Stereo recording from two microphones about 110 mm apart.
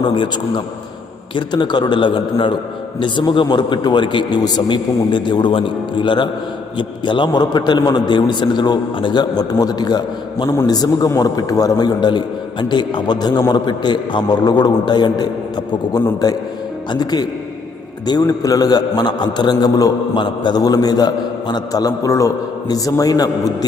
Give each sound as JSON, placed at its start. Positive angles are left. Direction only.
{"t": 0.0, "sound": "a man's voice", "side_deg": 45}